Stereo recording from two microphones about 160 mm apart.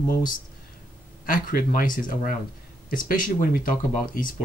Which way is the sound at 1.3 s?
60° left (ahead or behind).